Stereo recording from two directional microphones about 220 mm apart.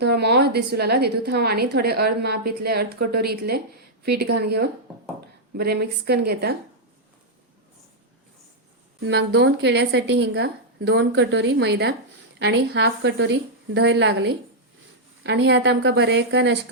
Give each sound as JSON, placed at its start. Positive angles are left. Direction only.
{"t": 0.0, "sound": "a woman's voice", "side_deg": -50}
{"t": 9.0, "sound": "a woman's voice", "side_deg": -50}